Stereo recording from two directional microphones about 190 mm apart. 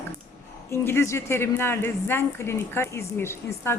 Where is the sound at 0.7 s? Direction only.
15° left (ahead or behind).